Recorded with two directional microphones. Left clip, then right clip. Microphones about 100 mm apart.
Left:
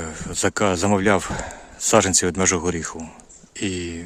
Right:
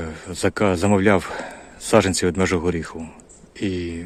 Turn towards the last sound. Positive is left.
turn(degrees=30)  # may be behind; listen again after turning